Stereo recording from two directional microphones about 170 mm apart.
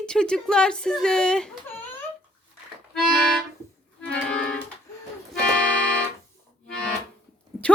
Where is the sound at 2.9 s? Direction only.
Centre (ahead or behind).